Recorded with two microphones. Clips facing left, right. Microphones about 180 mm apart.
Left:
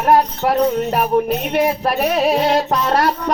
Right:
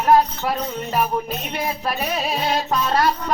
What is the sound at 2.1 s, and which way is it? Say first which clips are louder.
Music: left 9 dB; 75° left (ahead or behind).